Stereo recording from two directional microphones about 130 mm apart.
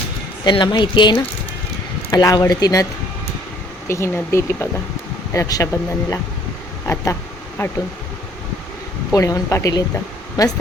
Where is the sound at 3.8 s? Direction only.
20° left (ahead or behind).